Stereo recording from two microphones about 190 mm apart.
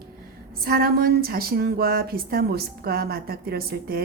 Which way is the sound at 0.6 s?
55° right (ahead or behind).